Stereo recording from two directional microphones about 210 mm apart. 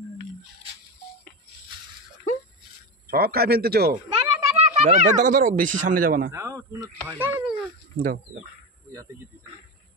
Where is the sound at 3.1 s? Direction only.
45° right (ahead or behind).